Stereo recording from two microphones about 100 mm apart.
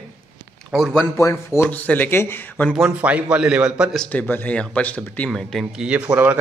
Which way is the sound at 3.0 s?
10° right (ahead or behind).